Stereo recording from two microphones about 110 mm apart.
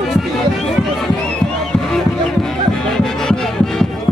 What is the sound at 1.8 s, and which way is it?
Music, 5° left (ahead or behind).